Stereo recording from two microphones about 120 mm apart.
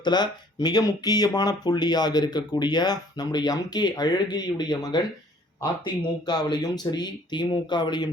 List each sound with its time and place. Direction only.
0.0 s speech: 35° left (ahead or behind)